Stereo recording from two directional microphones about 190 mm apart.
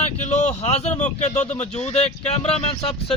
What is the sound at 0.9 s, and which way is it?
Speech, 35° left (ahead or behind).